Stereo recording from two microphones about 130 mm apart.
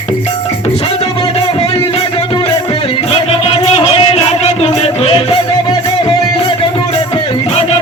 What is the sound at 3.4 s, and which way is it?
Music, 50° left (ahead or behind).